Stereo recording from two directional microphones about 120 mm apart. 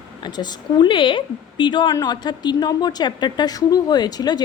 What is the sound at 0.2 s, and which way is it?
A woman's voice, 35° left (ahead or behind).